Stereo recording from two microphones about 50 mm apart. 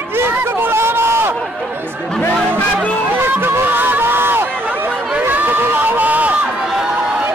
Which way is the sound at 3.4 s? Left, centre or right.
Right.